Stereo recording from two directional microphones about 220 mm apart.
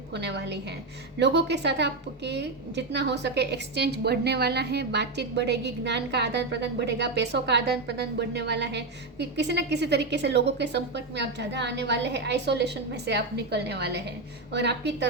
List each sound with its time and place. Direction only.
0.1 s a woman's voice: 50° right (ahead or behind)